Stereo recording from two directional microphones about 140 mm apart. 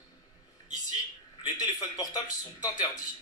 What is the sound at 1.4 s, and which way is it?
Speech, 30° left (ahead or behind).